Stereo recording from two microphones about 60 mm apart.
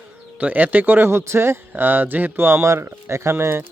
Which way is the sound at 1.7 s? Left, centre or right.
Right.